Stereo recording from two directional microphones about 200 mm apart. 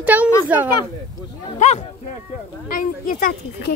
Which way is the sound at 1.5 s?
35° left (ahead or behind).